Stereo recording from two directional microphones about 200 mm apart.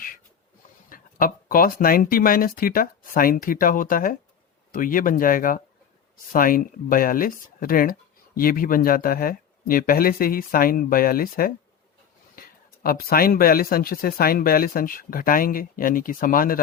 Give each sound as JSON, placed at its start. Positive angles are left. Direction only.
{"t": 0.9, "sound": "speech", "side_deg": 45}